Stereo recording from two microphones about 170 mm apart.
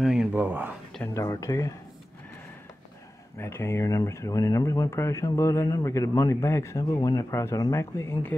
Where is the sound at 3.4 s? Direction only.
15° left (ahead or behind).